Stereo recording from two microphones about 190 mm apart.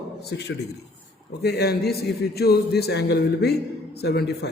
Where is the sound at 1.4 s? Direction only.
60° left (ahead or behind).